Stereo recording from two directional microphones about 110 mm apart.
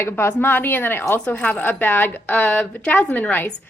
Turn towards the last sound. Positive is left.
turn(degrees=15)  # may be behind; listen again after turning